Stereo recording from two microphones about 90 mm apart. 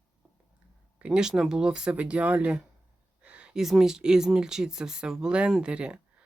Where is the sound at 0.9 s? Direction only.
10° right (ahead or behind).